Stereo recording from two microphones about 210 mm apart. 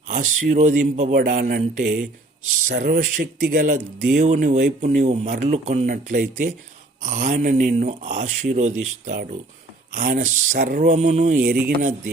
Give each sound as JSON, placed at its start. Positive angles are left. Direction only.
{"t": 0.1, "sound": "speech", "side_deg": -40}
{"t": 9.9, "sound": "speech", "side_deg": -40}